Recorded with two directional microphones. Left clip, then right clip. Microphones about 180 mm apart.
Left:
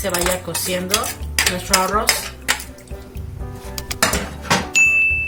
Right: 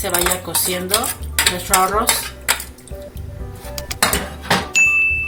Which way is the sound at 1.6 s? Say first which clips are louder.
Right 3 dB; 40° right (ahead or behind).